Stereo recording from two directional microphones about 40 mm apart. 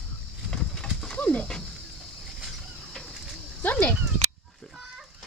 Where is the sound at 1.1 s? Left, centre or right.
Left.